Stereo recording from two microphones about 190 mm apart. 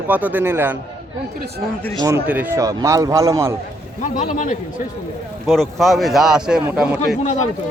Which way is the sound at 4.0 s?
40° left (ahead or behind).